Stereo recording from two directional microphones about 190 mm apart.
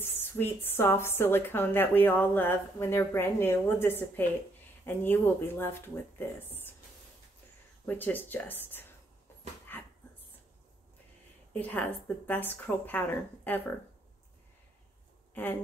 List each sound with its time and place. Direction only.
0.0 s a sound: 10° left (ahead or behind)
0.7 s a woman's voice: 10° left (ahead or behind)
7.8 s a woman's voice: 10° left (ahead or behind)
11.5 s a woman's voice: 10° left (ahead or behind)
15.4 s a woman's voice: 10° left (ahead or behind)